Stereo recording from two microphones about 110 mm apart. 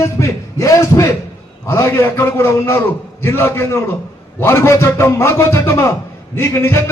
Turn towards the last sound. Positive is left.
turn(degrees=20)  # may be behind; listen again after turning